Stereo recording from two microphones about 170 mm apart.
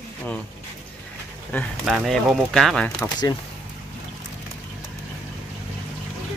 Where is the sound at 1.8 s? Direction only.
Centre (ahead or behind).